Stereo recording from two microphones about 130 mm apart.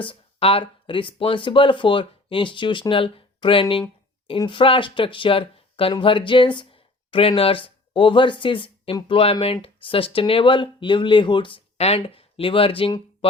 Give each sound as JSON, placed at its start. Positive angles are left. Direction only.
{"t": 0.0, "sound": "speech", "side_deg": 45}